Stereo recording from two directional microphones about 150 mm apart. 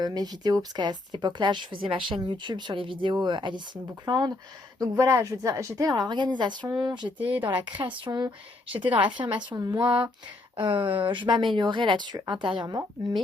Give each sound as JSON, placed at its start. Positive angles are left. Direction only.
{"t": 0.0, "sound": "a woman's voice", "side_deg": -25}
{"t": 8.8, "sound": "a woman's voice", "side_deg": -10}
{"t": 9.0, "sound": "speech", "side_deg": -30}